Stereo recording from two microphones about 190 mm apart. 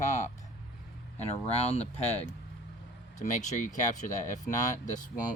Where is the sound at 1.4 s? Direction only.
35° left (ahead or behind).